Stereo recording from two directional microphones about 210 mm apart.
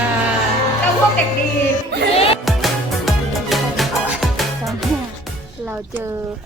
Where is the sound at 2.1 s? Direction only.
25° left (ahead or behind).